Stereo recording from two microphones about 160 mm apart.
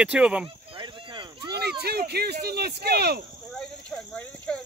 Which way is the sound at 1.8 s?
90° right.